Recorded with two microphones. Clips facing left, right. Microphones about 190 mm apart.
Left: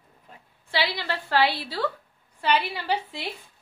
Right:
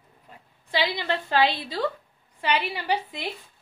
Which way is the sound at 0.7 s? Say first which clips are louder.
Right 2 dB; 15° right (ahead or behind).